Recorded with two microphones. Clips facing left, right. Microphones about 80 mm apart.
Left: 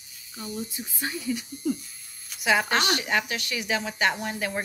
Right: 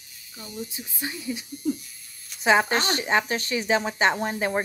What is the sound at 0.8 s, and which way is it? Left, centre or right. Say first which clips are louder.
Speech: left 1 dB; left.